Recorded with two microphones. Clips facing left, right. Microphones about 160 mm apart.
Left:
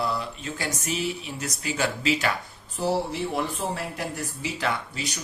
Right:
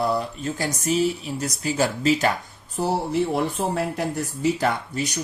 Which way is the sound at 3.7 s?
50° right (ahead or behind).